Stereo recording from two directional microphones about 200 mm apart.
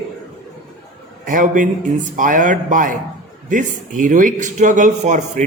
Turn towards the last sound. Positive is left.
turn(degrees=-35)  # may be behind; listen again after turning